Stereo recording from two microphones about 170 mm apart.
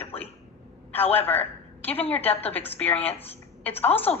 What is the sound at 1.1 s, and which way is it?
A woman's voice, 10° left (ahead or behind).